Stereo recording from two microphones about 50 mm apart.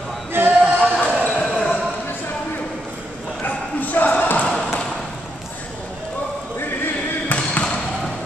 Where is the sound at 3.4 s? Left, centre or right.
Left.